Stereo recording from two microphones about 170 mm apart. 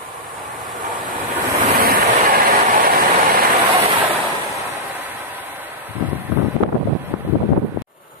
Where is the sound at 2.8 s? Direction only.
60° right (ahead or behind).